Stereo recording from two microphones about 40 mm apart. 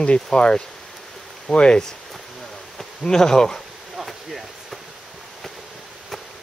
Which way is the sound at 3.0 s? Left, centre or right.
Centre.